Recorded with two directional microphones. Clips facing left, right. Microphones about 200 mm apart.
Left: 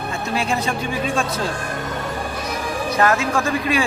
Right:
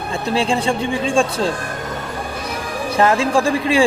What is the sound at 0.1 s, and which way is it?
Speech, 30° right (ahead or behind).